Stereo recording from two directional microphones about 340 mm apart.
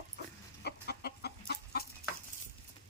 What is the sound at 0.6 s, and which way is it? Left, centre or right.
Chicken, left.